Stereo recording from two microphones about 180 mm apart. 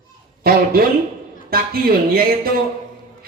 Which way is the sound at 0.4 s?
55° right (ahead or behind).